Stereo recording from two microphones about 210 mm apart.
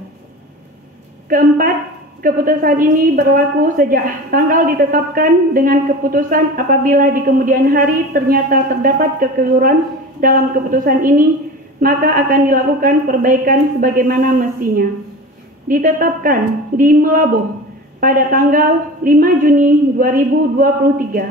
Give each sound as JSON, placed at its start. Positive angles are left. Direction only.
{"t": 2.2, "sound": "a woman's voice", "side_deg": -40}